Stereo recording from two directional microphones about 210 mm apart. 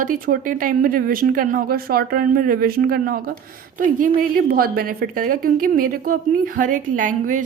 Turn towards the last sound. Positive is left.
turn(degrees=-40)  # may be behind; listen again after turning